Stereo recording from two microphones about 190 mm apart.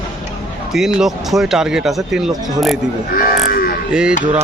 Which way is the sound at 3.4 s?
50° left (ahead or behind).